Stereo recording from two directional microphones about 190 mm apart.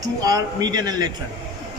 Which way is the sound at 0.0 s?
20° right (ahead or behind).